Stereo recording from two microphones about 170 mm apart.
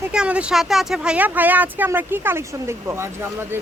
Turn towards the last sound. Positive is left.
turn(degrees=-15)  # may be behind; listen again after turning